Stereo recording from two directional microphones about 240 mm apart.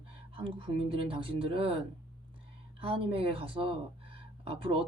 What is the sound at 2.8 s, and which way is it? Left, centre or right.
Speech, right.